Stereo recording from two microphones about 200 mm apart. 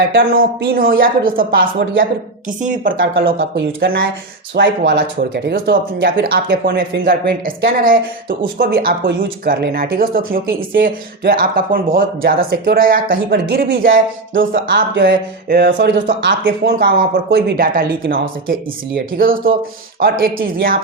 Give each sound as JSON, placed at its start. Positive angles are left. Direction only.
{"t": 0.2, "sound": "speech", "side_deg": -45}
{"t": 14.5, "sound": "speech", "side_deg": -45}
{"t": 14.9, "sound": "speech", "side_deg": -60}
{"t": 19.1, "sound": "speech", "side_deg": -45}